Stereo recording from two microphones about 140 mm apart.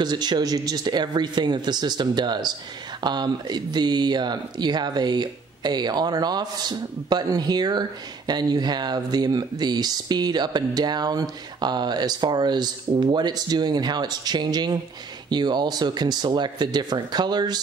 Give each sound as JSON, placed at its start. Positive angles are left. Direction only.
{"t": 0.0, "sound": "speech", "side_deg": -30}